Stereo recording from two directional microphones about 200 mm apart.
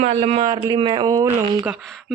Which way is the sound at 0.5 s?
20° right (ahead or behind).